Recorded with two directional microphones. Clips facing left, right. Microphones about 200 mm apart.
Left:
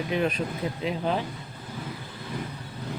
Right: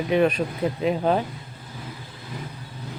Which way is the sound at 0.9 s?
50° right (ahead or behind).